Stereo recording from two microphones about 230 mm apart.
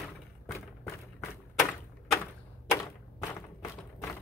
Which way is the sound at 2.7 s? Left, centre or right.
Centre.